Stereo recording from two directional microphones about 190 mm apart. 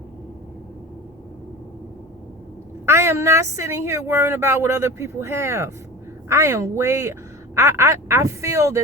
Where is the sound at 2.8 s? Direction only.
15° right (ahead or behind).